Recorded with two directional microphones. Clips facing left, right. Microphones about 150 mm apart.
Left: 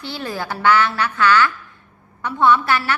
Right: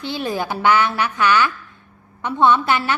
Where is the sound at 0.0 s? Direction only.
20° right (ahead or behind).